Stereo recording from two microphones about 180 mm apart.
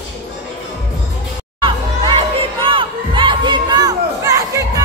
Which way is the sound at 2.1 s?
30° right (ahead or behind).